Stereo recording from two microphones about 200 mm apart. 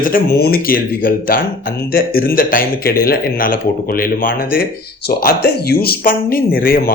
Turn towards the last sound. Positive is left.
turn(degrees=45)  # may be behind; listen again after turning